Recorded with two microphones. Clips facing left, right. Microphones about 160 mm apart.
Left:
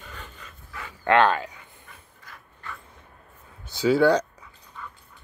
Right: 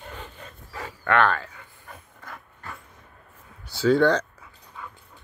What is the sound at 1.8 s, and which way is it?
Mechanisms, 55° right (ahead or behind).